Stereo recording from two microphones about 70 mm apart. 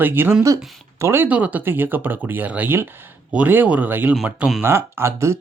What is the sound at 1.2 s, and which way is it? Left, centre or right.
Speech, centre.